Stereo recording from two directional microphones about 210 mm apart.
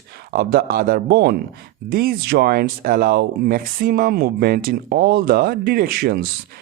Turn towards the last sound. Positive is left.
turn(degrees=-50)  # may be behind; listen again after turning